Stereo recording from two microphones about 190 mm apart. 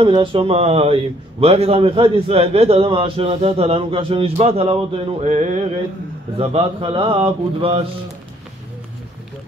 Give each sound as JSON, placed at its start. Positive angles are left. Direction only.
{"t": 0.0, "sound": "a man's voice", "side_deg": -25}